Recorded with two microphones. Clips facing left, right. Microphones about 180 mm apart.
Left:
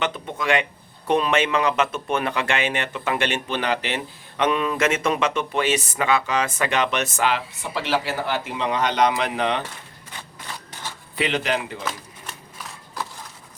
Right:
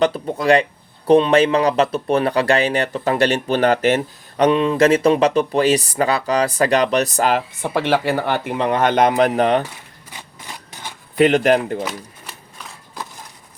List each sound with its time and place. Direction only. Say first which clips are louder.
0.0 s speech: right 8 dB; 35° right (ahead or behind)
10.1 s a sound: right 1 dB; 15° right (ahead or behind)
11.2 s speech: right 10 dB; 50° right (ahead or behind)